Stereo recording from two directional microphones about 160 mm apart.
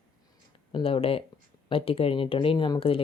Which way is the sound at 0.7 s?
35° left (ahead or behind).